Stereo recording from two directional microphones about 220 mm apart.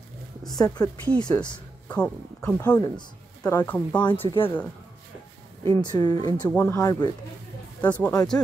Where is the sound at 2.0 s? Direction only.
5° left (ahead or behind).